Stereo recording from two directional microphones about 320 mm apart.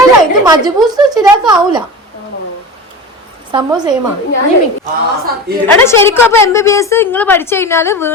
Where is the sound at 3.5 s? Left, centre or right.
Centre.